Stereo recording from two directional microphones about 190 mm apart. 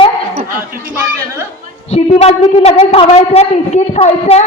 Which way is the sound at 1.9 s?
30° left (ahead or behind).